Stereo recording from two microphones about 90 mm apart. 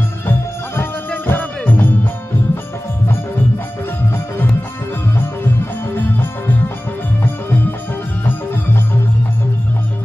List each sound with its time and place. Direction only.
0.3 s music: 25° left (ahead or behind)
5.9 s music: 20° left (ahead or behind)